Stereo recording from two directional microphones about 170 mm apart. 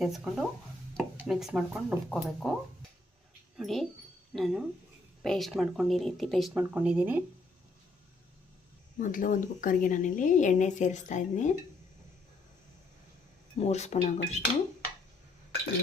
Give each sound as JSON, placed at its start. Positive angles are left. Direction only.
{"t": 0.0, "sound": "speech", "side_deg": 0}
{"t": 6.5, "sound": "speech", "side_deg": -10}
{"t": 9.0, "sound": "a woman's voice", "side_deg": 50}
{"t": 13.6, "sound": "speech", "side_deg": 40}